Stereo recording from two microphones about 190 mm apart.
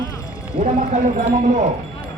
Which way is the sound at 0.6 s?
40° right (ahead or behind).